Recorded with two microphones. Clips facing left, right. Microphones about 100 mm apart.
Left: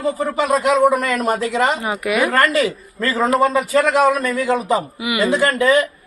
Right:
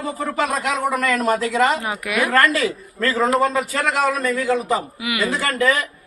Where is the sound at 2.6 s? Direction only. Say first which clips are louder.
Left 3 dB; 15° left (ahead or behind).